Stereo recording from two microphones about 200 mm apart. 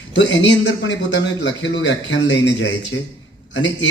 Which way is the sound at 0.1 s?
65° left (ahead or behind).